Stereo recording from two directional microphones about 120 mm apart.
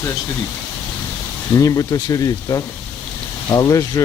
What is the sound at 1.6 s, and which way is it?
Speech, 30° left (ahead or behind).